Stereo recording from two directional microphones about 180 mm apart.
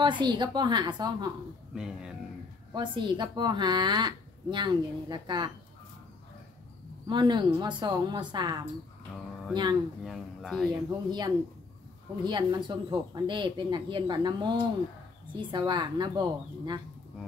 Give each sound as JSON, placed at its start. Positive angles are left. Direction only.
{"t": 0.0, "sound": "speech", "side_deg": -25}
{"t": 1.8, "sound": "speech", "side_deg": -5}
{"t": 2.7, "sound": "speech", "side_deg": -25}
{"t": 7.1, "sound": "speech", "side_deg": -25}
{"t": 10.0, "sound": "speech", "side_deg": 0}
{"t": 10.7, "sound": "speech", "side_deg": -25}